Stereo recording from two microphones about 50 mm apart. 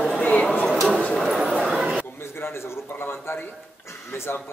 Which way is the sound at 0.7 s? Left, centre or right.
Centre.